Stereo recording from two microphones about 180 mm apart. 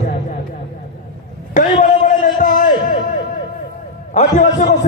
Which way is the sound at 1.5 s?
45° left (ahead or behind).